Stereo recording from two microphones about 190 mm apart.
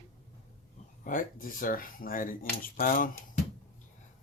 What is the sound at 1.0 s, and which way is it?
Speech, 45° left (ahead or behind).